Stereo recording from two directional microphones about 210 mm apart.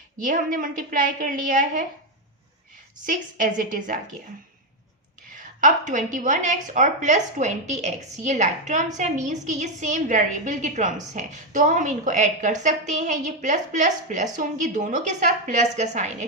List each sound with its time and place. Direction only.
0.2 s a woman's voice: 40° right (ahead or behind)
3.1 s a woman's voice: 40° right (ahead or behind)
5.4 s a woman's voice: 40° right (ahead or behind)